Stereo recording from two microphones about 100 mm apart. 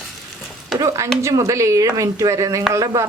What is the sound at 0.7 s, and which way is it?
Speech, 30° right (ahead or behind).